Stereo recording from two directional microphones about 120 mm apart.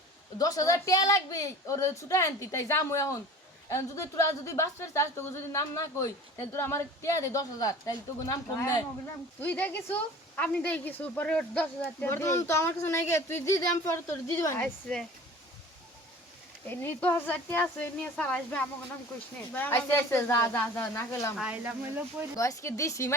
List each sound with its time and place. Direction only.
0.3 s speech: 30° left (ahead or behind)
9.4 s speech: 15° left (ahead or behind)
14.6 s speech: 10° left (ahead or behind)
16.6 s speech: 15° left (ahead or behind)
21.3 s speech: 10° right (ahead or behind)
22.4 s speech: 25° left (ahead or behind)